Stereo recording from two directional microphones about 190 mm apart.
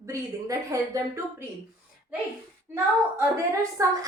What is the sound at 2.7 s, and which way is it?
A woman's voice, 15° right (ahead or behind).